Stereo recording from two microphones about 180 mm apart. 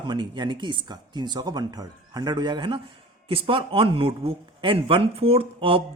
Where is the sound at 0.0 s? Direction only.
25° right (ahead or behind).